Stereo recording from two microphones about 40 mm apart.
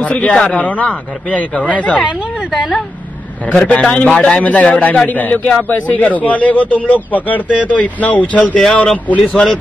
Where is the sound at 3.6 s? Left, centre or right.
Left.